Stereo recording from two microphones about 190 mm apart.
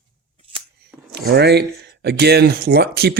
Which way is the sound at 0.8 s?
55° right (ahead or behind).